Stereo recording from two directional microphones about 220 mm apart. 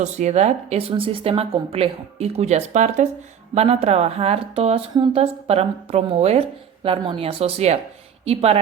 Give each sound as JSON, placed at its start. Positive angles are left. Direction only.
{"t": 0.0, "sound": "a woman's voice", "side_deg": -30}